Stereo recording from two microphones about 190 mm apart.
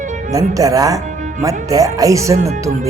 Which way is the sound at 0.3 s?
20° right (ahead or behind).